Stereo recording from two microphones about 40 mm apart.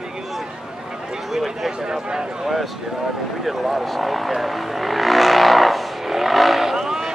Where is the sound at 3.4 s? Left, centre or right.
Centre.